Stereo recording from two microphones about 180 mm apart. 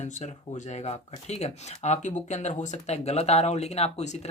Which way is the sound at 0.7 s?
35° left (ahead or behind).